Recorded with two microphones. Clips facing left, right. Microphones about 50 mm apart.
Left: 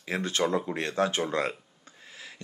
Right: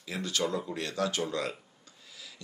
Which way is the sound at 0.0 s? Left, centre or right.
Left.